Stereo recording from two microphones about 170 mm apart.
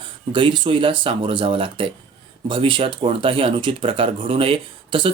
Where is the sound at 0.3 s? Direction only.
30° right (ahead or behind).